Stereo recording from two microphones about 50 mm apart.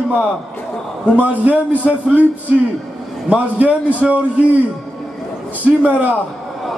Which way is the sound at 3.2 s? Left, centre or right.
Right.